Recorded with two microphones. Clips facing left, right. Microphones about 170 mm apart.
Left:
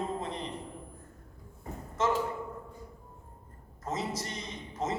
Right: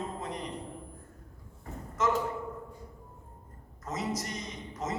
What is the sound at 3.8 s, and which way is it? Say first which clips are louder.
A man's voice: even; 30° left (ahead or behind).